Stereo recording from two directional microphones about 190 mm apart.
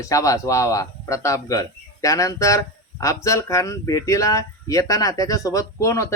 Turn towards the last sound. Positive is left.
turn(degrees=15)  # may be behind; listen again after turning